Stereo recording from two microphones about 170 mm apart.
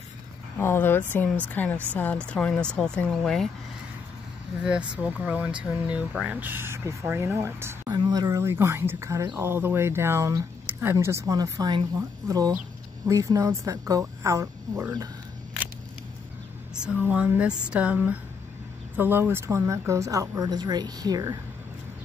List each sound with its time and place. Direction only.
0.6 s speech: 15° left (ahead or behind)
4.6 s speech: 5° right (ahead or behind)
16.7 s speech: 5° right (ahead or behind); by 21.4 s 20° right (ahead or behind)